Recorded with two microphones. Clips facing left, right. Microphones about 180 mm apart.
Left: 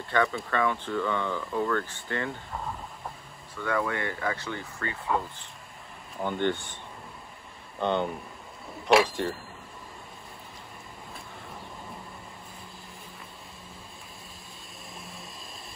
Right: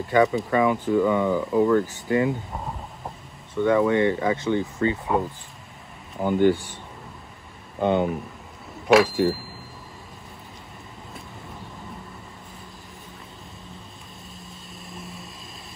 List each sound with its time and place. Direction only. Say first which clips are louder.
0.1 s speech: right 7 dB; 15° right (ahead or behind)
6.2 s speech: right 9 dB; 5° right (ahead or behind)
7.8 s speech: right 6 dB; 10° right (ahead or behind)
14.9 s vehicle: right 5 dB; centre (ahead or behind)